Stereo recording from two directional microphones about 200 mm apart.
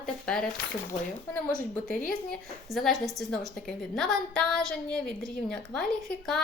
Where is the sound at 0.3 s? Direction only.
5° left (ahead or behind).